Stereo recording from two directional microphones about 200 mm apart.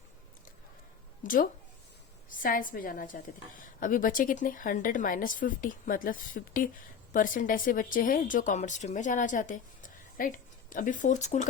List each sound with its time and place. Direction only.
1.2 s a woman's voice: 45° left (ahead or behind)